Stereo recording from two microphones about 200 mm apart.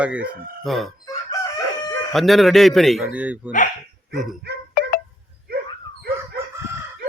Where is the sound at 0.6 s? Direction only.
Centre (ahead or behind).